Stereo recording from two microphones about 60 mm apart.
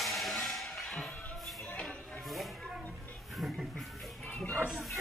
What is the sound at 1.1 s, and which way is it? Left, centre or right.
Music, left.